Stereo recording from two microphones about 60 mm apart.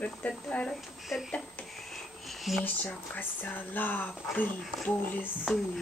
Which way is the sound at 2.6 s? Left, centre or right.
Left.